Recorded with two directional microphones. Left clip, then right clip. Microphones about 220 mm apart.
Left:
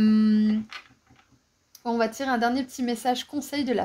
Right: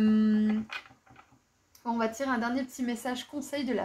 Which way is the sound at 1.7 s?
50° left (ahead or behind).